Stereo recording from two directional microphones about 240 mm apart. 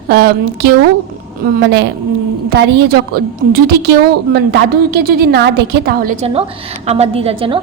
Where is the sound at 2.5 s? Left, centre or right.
Right.